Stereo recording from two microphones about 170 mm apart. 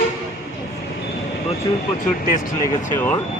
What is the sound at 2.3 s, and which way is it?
Speech, 50° left (ahead or behind).